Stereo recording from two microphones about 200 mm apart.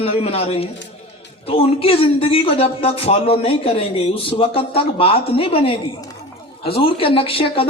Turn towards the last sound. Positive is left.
turn(degrees=25)  # may be behind; listen again after turning